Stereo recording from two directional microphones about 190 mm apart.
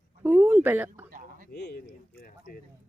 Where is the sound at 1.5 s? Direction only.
55° left (ahead or behind).